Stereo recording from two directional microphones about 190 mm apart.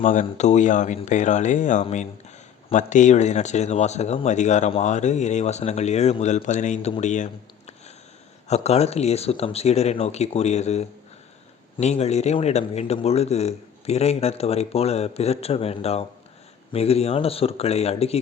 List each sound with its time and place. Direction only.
0.0 s speech: 45° left (ahead or behind)
8.4 s speech: 35° left (ahead or behind)